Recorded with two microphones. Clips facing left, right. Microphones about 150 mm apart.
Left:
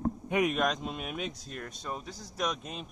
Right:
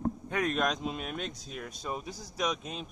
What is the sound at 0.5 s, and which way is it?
Speech, centre (ahead or behind).